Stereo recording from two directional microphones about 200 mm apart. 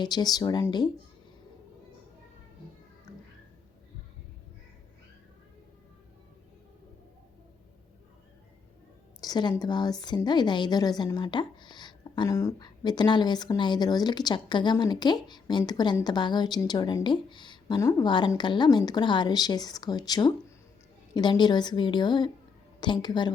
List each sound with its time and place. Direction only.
0.0 s a woman's voice: 20° left (ahead or behind)
3.1 s music: 15° left (ahead or behind)
9.2 s a woman's voice: 20° left (ahead or behind)